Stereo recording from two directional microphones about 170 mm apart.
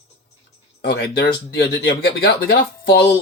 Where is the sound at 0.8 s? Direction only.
65° left (ahead or behind).